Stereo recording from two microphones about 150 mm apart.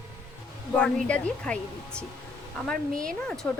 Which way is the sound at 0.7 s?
10° left (ahead or behind).